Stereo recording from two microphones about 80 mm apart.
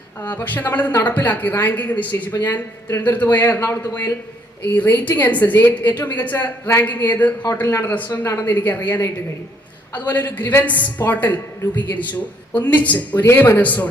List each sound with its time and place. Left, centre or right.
0.2 s speech: left
8.2 s a woman's voice: left
8.4 s speech: left